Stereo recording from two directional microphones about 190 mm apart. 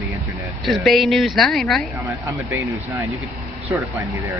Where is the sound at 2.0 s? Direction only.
15° right (ahead or behind).